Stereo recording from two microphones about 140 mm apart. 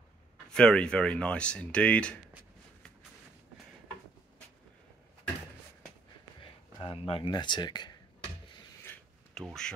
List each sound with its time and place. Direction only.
0.5 s speech: 5° left (ahead or behind)
6.4 s speech: 40° left (ahead or behind)
9.3 s speech: 5° left (ahead or behind)